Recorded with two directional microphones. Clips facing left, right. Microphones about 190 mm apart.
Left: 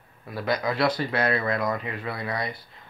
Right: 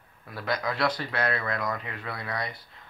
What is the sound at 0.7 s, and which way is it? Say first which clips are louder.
Speech: left 4 dB; 10° left (ahead or behind).